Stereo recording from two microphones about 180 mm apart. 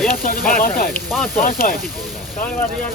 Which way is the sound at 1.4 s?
55° left (ahead or behind).